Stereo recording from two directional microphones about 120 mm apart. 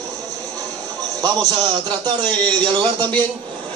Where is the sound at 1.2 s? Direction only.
35° right (ahead or behind).